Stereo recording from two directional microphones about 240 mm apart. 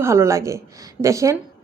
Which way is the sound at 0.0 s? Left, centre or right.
Centre.